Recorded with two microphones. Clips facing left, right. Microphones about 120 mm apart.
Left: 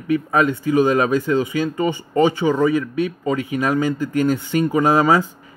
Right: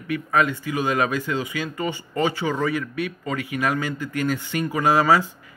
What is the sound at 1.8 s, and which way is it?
Speech, 20° left (ahead or behind).